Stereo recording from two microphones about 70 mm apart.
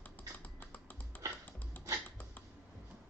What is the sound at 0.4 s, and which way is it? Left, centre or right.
Computer keyboard, left.